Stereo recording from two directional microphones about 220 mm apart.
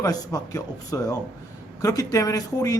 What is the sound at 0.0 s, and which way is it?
A man's voice, 15° left (ahead or behind).